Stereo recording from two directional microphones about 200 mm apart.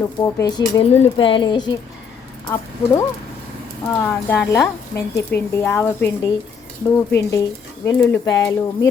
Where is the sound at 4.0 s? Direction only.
10° left (ahead or behind).